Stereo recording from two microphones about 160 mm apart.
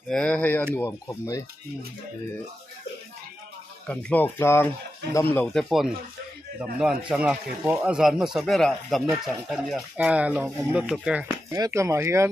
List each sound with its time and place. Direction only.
0.1 s speech: 5° left (ahead or behind)
3.8 s speech: 10° left (ahead or behind)
11.5 s speech: 20° right (ahead or behind)